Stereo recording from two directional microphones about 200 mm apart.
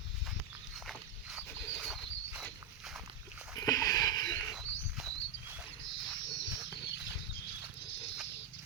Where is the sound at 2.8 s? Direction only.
Centre (ahead or behind).